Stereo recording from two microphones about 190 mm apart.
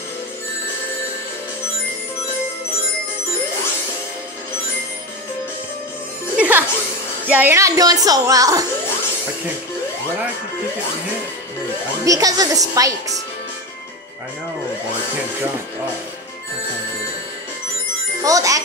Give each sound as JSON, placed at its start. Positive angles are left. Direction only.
{"t": 6.3, "sound": "music", "side_deg": -5}
{"t": 7.2, "sound": "speech", "side_deg": -10}
{"t": 12.0, "sound": "a woman's voice", "side_deg": -20}
{"t": 18.2, "sound": "a child's voice", "side_deg": -15}